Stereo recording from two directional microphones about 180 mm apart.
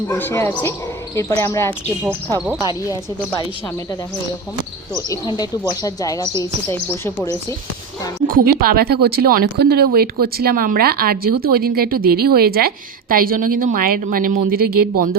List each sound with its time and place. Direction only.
0.1 s a man's voice: 10° left (ahead or behind)
5.1 s a woman's voice: 20° left (ahead or behind)
8.3 s speech: 55° right (ahead or behind)